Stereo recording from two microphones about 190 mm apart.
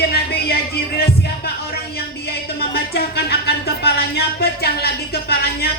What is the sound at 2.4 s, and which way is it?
Speech, 55° left (ahead or behind).